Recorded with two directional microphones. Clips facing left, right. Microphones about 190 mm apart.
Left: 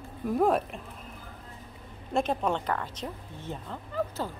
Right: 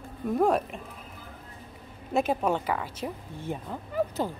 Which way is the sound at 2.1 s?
5° right (ahead or behind).